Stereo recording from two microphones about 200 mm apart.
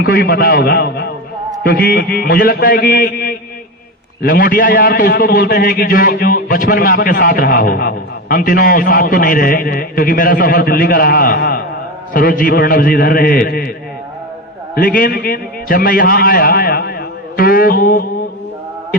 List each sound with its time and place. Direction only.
0.0 s a man's voice: 50° left (ahead or behind)
14.8 s a man's voice: 45° left (ahead or behind)